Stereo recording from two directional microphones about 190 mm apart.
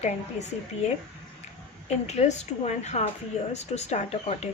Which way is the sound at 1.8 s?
35° left (ahead or behind).